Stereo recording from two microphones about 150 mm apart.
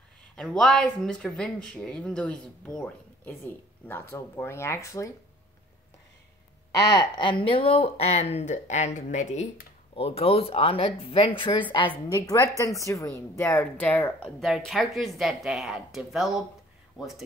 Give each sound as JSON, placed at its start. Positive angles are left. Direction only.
{"t": 0.4, "sound": "speech", "side_deg": 5}
{"t": 6.8, "sound": "a woman's voice", "side_deg": 30}
{"t": 12.2, "sound": "speech", "side_deg": 20}